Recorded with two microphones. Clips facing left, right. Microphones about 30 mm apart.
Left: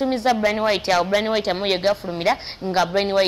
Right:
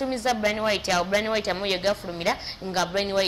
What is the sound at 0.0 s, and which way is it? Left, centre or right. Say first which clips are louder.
Speech: left 5 dB; left.